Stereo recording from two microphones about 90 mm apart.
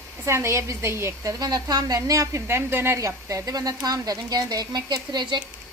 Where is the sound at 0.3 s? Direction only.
30° right (ahead or behind); by 5.4 s 55° right (ahead or behind).